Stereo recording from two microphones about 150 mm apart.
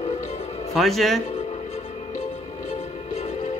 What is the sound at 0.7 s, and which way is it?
Speech, centre (ahead or behind).